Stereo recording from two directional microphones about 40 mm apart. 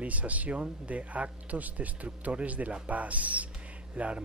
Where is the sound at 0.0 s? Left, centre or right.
Right.